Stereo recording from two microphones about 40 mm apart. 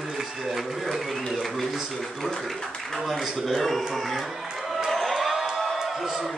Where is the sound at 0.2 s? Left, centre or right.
Centre.